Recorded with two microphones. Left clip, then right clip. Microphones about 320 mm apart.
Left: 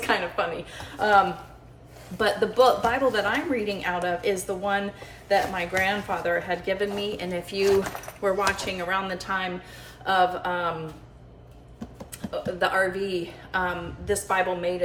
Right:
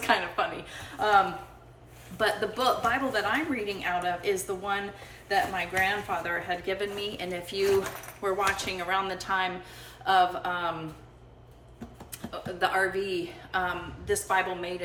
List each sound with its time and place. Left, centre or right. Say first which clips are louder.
0.0 s a woman's voice: left 1 dB; centre
12.3 s a woman's voice: left 3 dB; centre